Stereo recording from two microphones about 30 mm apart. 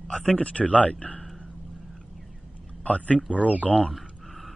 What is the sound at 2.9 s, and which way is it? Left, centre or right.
Speech, left.